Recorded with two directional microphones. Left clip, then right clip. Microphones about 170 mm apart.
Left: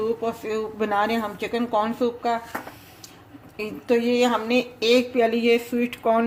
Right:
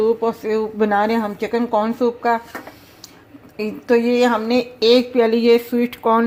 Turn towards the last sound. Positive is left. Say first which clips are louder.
# right 5 dB
turn(degrees=-25)  # may be behind; listen again after turning